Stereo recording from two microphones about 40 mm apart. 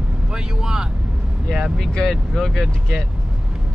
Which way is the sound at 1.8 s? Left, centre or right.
Centre.